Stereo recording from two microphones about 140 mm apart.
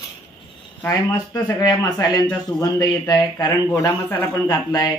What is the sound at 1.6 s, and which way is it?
Speech, 30° left (ahead or behind).